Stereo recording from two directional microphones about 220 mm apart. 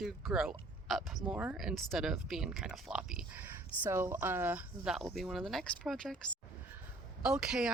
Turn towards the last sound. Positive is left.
turn(degrees=-5)  # may be behind; listen again after turning